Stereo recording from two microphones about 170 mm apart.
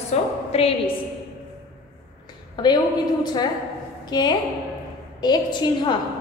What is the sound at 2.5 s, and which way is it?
A woman's voice, 25° left (ahead or behind).